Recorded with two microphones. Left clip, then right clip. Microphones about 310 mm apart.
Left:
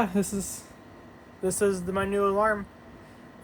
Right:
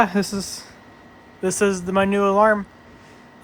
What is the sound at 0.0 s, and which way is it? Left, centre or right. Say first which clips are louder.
Speech: right 8 dB; right.